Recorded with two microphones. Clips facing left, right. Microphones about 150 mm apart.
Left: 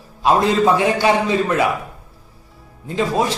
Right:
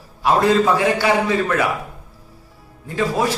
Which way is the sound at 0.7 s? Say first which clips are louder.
Left 1 dB; 20° left (ahead or behind).